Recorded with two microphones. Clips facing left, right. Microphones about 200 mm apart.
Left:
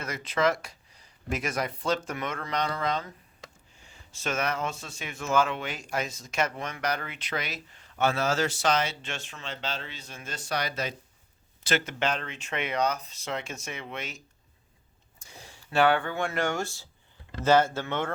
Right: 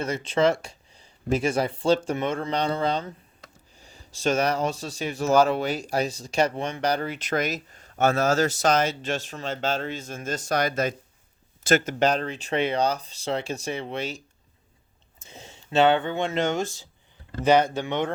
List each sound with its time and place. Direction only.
0.0 s speech: 30° right (ahead or behind)
15.2 s speech: 20° right (ahead or behind)